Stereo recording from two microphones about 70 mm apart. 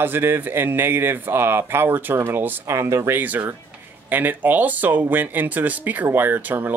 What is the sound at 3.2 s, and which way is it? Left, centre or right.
Speech, right.